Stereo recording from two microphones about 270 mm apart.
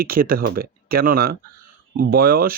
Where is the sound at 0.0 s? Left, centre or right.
Right.